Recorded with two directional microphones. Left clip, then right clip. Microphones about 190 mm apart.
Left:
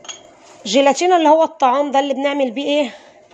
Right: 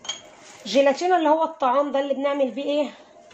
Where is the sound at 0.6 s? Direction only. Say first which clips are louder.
Left 5 dB; 50° left (ahead or behind).